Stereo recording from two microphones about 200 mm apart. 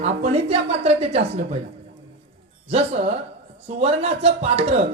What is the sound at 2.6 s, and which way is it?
Speech, 30° right (ahead or behind).